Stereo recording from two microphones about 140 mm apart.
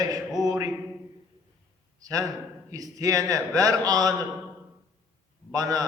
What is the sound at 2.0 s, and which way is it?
A man's voice, 25° right (ahead or behind).